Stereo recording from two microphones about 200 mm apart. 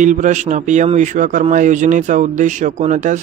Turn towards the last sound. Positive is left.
turn(degrees=-35)  # may be behind; listen again after turning